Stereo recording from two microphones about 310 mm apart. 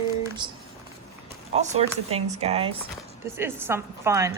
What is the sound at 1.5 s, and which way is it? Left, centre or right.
Speech, centre.